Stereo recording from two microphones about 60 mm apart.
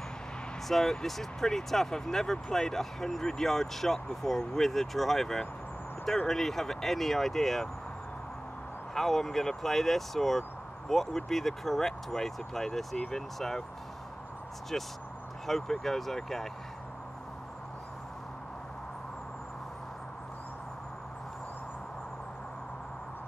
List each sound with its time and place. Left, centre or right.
0.7 s speech: centre
8.9 s speech: centre
14.7 s speech: centre